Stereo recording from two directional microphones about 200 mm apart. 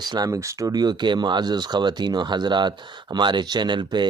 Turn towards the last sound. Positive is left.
turn(degrees=-20)  # may be behind; listen again after turning